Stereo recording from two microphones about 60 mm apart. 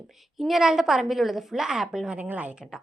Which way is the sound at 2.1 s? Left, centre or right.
Right.